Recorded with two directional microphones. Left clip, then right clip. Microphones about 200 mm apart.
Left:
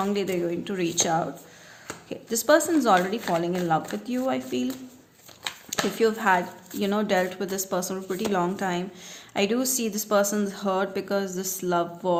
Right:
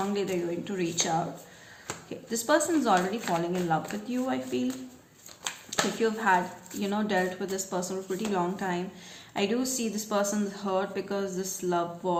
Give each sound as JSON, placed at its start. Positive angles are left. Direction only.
{"t": 0.1, "sound": "a woman's voice", "side_deg": 50}
{"t": 5.4, "sound": "a sound", "side_deg": 5}
{"t": 6.0, "sound": "a woman's voice", "side_deg": 50}